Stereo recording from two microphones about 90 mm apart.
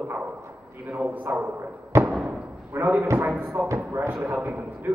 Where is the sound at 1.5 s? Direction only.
25° right (ahead or behind).